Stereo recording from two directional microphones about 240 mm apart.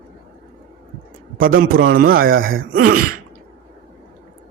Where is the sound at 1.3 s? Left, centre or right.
Right.